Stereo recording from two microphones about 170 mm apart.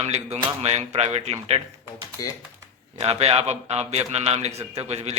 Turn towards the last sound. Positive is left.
turn(degrees=-40)  # may be behind; listen again after turning